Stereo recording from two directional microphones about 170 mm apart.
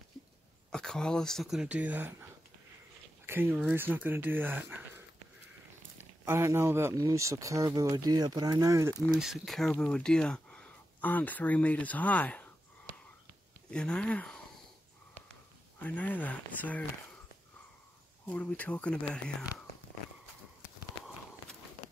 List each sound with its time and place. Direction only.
0.7 s speech: 5° left (ahead or behind)
3.3 s speech: 10° right (ahead or behind)
6.2 s speech: 15° right (ahead or behind)
9.2 s speech: centre (ahead or behind)
13.7 s speech: 5° left (ahead or behind)
15.8 s speech: 10° left (ahead or behind)
18.2 s speech: 10° left (ahead or behind)